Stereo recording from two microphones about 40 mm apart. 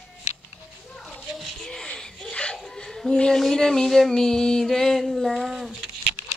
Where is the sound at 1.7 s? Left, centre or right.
Centre.